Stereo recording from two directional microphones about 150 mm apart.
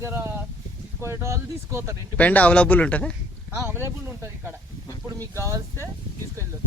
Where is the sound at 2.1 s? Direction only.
10° left (ahead or behind).